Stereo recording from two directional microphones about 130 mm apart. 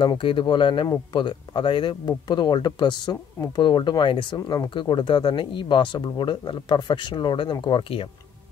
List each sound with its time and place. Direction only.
0.0 s speech: 40° left (ahead or behind)